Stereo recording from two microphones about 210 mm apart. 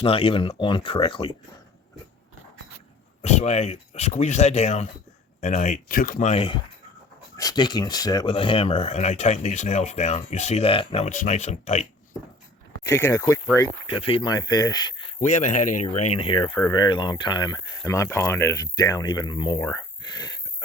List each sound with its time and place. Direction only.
0.0 s speech: 25° left (ahead or behind)
3.2 s speech: 30° left (ahead or behind)
12.8 s speech: 15° left (ahead or behind)
14.0 s speech: 25° left (ahead or behind)
15.2 s speech: 35° left (ahead or behind); by 20.3 s 20° left (ahead or behind)